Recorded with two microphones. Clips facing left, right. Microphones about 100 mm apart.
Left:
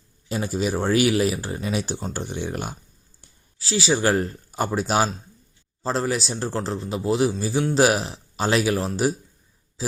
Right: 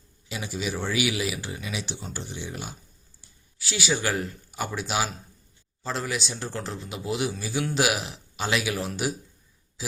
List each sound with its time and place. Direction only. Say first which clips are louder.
0.3 s speech: left 7 dB; 45° left (ahead or behind)
3.6 s speech: left 6 dB; 30° left (ahead or behind)